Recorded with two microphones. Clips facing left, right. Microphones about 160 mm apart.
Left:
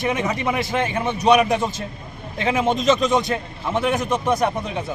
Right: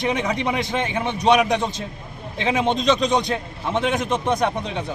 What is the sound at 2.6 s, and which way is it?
A man's voice, 5° left (ahead or behind).